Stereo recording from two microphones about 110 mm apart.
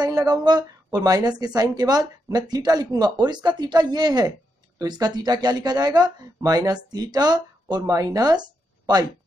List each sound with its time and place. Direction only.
0.0 s speech: 40° right (ahead or behind)